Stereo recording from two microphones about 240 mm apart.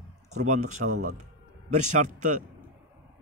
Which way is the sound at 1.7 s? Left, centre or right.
Right.